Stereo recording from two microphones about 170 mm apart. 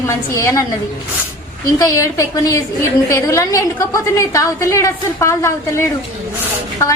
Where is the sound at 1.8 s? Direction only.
20° left (ahead or behind).